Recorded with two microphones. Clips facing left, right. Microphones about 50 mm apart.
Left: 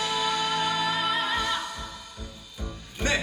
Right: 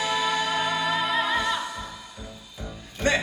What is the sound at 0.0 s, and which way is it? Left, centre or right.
Music, centre.